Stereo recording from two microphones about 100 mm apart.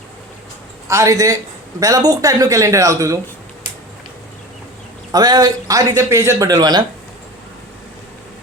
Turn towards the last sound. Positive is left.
turn(degrees=-40)  # may be behind; listen again after turning